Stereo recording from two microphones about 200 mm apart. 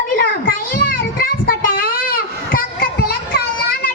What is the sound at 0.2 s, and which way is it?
Child singing, 45° left (ahead or behind).